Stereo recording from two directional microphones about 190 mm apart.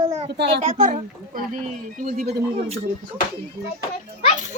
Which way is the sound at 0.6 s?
40° right (ahead or behind).